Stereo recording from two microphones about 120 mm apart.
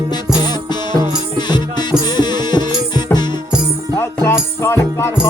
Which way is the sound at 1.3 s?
35° left (ahead or behind).